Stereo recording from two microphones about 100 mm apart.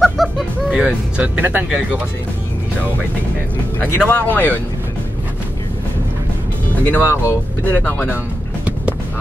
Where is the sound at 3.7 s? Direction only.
15° left (ahead or behind).